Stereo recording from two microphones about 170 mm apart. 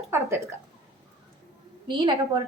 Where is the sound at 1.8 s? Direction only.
30° right (ahead or behind).